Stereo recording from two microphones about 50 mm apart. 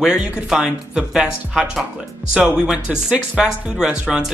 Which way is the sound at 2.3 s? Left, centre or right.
Centre.